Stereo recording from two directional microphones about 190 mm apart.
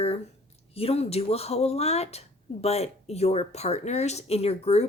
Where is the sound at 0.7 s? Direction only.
30° left (ahead or behind).